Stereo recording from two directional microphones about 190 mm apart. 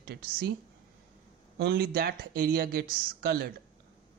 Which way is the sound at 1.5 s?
60° right (ahead or behind).